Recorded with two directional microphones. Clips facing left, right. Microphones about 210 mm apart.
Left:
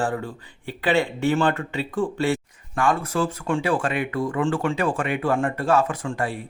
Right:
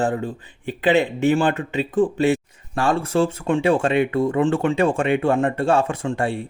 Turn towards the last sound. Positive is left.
turn(degrees=-25)  # may be behind; listen again after turning